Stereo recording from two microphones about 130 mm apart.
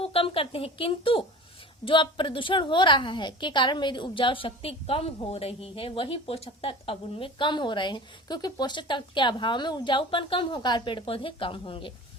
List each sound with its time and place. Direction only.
0.0 s a woman's voice: 45° left (ahead or behind)